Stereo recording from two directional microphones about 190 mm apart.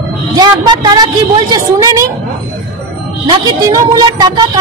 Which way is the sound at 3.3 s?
20° right (ahead or behind).